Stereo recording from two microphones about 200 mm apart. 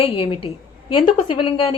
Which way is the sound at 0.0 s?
30° left (ahead or behind).